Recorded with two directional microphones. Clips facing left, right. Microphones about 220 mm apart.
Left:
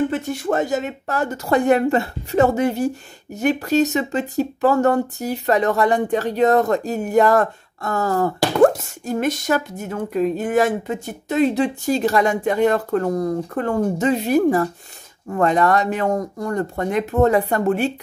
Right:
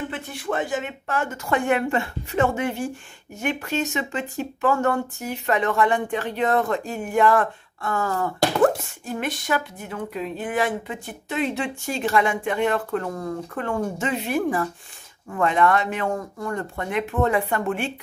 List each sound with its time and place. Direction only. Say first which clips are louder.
0.1 s speech: left 7 dB; 45° left (ahead or behind)